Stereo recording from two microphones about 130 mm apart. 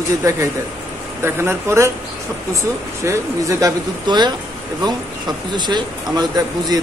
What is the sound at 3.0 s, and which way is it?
Speech, 25° right (ahead or behind).